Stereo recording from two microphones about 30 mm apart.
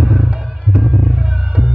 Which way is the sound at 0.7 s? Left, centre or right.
Right.